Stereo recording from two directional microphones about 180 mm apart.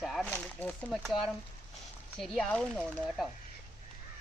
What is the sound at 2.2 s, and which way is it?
Speech, centre (ahead or behind).